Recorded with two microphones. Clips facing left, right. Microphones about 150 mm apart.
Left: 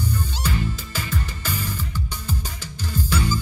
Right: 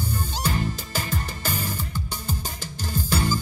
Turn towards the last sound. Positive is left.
turn(degrees=-45)  # may be behind; listen again after turning